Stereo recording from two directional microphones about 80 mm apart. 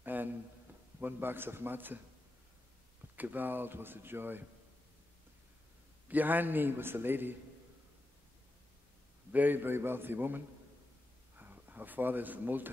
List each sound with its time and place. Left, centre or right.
0.0 s a sound: right
0.9 s speech: right
3.2 s speech: right
6.0 s speech: right
9.3 s speech: right